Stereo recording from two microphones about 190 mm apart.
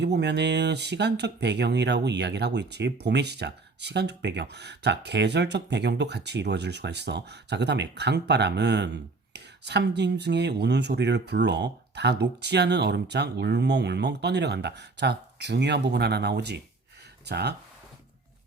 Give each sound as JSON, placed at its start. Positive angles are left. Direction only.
{"t": 0.0, "sound": "speech", "side_deg": -65}